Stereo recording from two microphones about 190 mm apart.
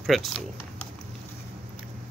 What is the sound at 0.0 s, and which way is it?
Speech, centre (ahead or behind).